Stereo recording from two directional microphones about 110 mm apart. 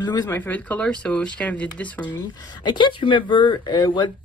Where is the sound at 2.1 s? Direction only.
40° left (ahead or behind).